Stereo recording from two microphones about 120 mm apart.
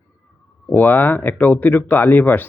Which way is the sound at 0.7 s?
15° left (ahead or behind).